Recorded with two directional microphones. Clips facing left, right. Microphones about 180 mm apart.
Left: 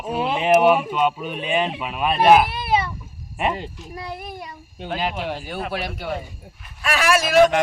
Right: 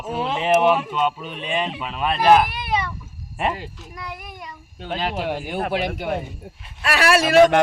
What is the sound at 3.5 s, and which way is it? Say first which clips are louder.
Speech: left 3 dB; 30° left (ahead or behind).